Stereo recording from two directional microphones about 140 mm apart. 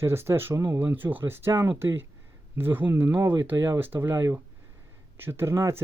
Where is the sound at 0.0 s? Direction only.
20° right (ahead or behind).